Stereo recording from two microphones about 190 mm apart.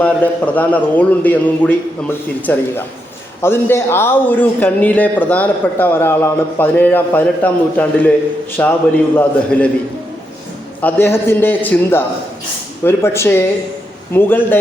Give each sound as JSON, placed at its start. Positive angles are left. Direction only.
{"t": 0.0, "sound": "speech", "side_deg": 10}
{"t": 10.8, "sound": "speech", "side_deg": 10}